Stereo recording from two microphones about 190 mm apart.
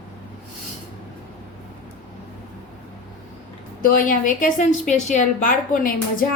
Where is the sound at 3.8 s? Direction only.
45° left (ahead or behind).